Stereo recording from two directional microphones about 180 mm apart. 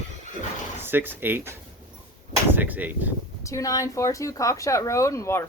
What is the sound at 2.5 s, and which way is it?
Speech, 10° right (ahead or behind).